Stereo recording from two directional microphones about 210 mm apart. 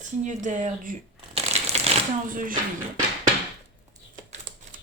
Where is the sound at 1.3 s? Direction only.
30° right (ahead or behind).